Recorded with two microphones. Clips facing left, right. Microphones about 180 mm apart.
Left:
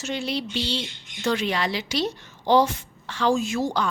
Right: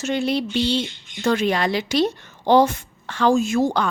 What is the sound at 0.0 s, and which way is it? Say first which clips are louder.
Speech: right 6 dB; 55° right (ahead or behind).